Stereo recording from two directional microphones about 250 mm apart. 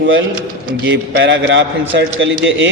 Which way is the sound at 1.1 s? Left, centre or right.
Right.